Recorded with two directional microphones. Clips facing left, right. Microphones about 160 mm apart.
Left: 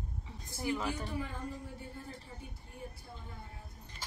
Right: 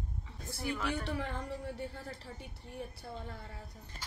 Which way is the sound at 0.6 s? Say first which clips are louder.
Left 1 dB; 20° left (ahead or behind).